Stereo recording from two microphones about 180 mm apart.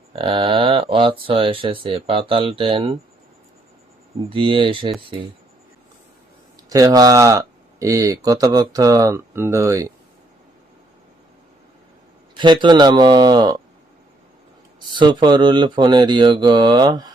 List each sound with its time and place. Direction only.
0.2 s speech: 30° right (ahead or behind)
4.3 s speech: 30° right (ahead or behind)
6.7 s speech: 20° right (ahead or behind)
12.4 s speech: 25° right (ahead or behind)
14.9 s speech: 25° right (ahead or behind)